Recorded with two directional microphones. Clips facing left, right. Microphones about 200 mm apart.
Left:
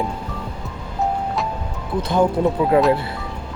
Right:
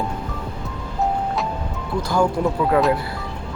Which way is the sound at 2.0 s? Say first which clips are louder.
Left 2 dB; 20° left (ahead or behind).